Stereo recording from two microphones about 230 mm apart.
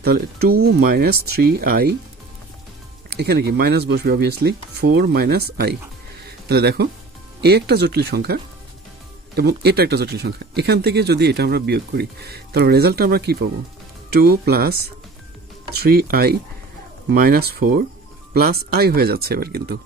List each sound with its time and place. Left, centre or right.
0.0 s speech: right
3.2 s speech: right
6.2 s a sound: right
7.4 s speech: right